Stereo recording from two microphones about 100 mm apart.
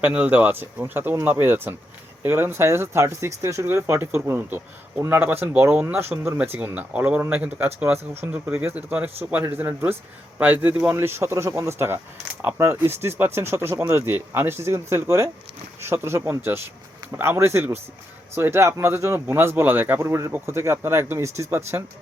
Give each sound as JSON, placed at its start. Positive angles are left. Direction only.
{"t": 0.0, "sound": "speech", "side_deg": -15}